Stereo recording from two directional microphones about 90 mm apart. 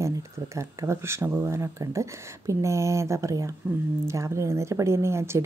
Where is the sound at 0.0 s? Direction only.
35° right (ahead or behind).